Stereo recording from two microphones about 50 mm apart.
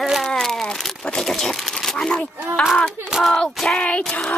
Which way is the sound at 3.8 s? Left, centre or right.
Left.